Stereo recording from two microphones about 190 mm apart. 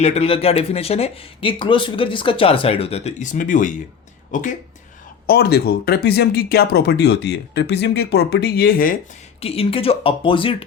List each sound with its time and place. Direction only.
0.0 s speech: 35° left (ahead or behind)
5.2 s speech: 55° left (ahead or behind)
9.4 s speech: 30° left (ahead or behind)